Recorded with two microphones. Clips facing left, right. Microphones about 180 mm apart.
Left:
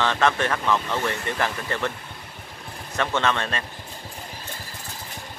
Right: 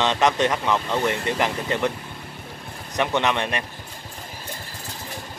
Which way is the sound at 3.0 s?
15° right (ahead or behind).